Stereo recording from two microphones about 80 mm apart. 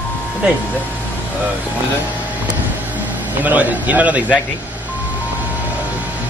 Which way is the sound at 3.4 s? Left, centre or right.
Right.